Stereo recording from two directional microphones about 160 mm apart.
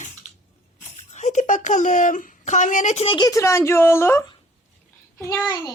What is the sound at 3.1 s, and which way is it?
Speech, 25° left (ahead or behind).